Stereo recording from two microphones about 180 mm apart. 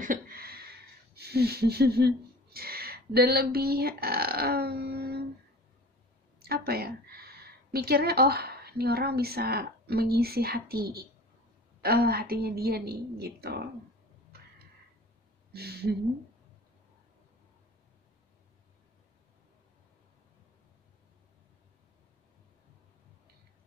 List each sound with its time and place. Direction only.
0.0 s a sound: 50° right (ahead or behind)
6.4 s a woman's voice: 60° right (ahead or behind)
15.5 s a woman's voice: 60° right (ahead or behind)